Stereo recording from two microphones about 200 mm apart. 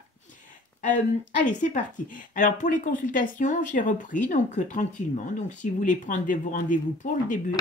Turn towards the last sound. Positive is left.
turn(degrees=40)  # may be behind; listen again after turning